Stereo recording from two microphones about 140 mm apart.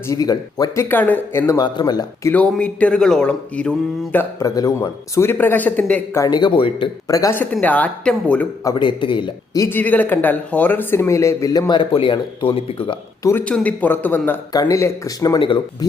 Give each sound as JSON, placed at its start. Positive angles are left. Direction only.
{"t": 0.1, "sound": "speech", "side_deg": 25}
{"t": 0.9, "sound": "speech", "side_deg": 15}
{"t": 1.5, "sound": "speech", "side_deg": 30}
{"t": 2.3, "sound": "speech", "side_deg": 10}
{"t": 6.2, "sound": "speech", "side_deg": 30}
{"t": 7.1, "sound": "speech", "side_deg": 20}
{"t": 7.5, "sound": "speech", "side_deg": 10}
{"t": 8.7, "sound": "speech", "side_deg": 35}
{"t": 9.6, "sound": "speech", "side_deg": 15}
{"t": 13.2, "sound": "speech", "side_deg": 10}
{"t": 14.5, "sound": "speech", "side_deg": 25}